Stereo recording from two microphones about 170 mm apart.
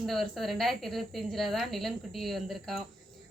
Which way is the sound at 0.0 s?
Centre (ahead or behind).